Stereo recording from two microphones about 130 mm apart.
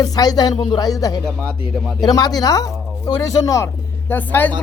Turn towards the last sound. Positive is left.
turn(degrees=15)  # may be behind; listen again after turning